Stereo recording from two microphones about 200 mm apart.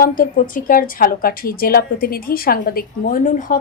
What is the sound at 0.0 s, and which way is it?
Speech, 45° left (ahead or behind).